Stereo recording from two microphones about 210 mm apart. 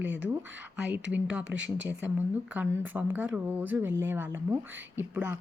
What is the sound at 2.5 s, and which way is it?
Speech, 10° right (ahead or behind).